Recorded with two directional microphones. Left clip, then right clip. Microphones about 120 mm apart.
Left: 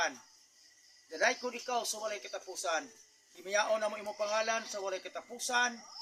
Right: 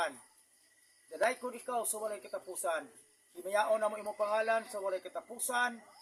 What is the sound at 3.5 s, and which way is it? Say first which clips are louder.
A man's voice: right 1 dB; 30° right (ahead or behind).